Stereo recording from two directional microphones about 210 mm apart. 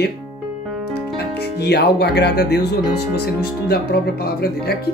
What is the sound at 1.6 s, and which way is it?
Speech, 50° left (ahead or behind).